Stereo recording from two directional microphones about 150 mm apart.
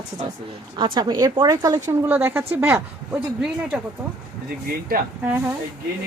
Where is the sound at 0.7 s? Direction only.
30° right (ahead or behind).